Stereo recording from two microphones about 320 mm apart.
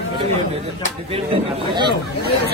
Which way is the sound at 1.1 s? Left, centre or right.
Centre.